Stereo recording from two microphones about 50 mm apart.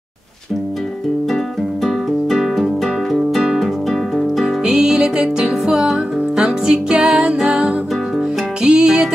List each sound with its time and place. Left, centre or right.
1.9 s music: centre
4.6 s music: centre